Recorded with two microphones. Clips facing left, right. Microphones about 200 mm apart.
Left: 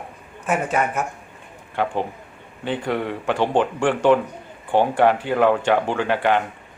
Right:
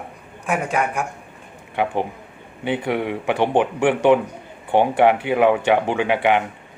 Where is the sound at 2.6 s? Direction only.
15° right (ahead or behind).